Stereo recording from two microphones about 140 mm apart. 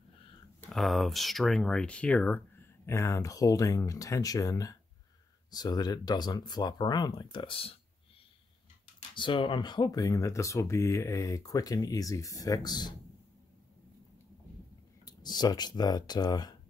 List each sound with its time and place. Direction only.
0.6 s speech: centre (ahead or behind)
2.9 s speech: 20° left (ahead or behind); by 7.7 s 40° left (ahead or behind)
9.1 s speech: 35° left (ahead or behind)
15.0 s speech: 30° left (ahead or behind)